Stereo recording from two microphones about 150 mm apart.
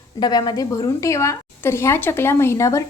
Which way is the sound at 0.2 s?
25° left (ahead or behind).